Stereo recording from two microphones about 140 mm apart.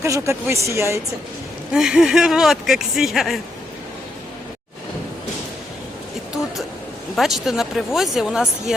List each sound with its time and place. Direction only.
0.0 s speech: 20° right (ahead or behind)
1.7 s speech: 5° right (ahead or behind)
7.2 s speech: centre (ahead or behind)